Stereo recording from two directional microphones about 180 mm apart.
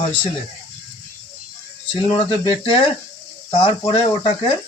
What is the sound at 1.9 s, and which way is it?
Speech, 30° left (ahead or behind).